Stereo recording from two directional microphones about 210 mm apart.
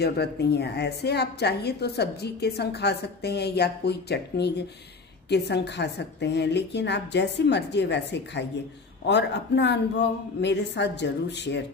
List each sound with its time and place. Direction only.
0.0 s a woman's voice: 50° left (ahead or behind)